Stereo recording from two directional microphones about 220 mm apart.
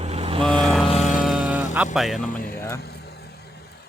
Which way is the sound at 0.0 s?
25° right (ahead or behind).